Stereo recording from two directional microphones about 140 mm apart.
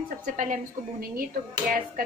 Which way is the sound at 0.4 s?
75° right (ahead or behind).